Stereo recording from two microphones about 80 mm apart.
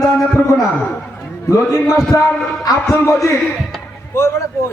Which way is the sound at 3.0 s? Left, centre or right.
Left.